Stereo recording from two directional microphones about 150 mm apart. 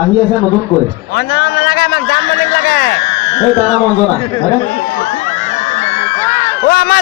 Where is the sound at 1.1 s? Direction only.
90° left.